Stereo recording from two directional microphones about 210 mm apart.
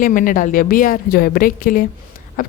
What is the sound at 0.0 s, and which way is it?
A woman's voice, 40° left (ahead or behind).